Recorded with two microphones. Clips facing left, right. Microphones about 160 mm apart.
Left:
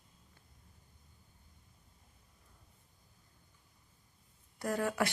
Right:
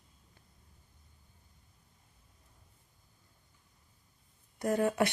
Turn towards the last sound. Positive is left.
turn(degrees=-20)  # may be behind; listen again after turning